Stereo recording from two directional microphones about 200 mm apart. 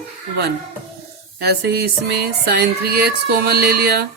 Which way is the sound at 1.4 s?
55° right (ahead or behind).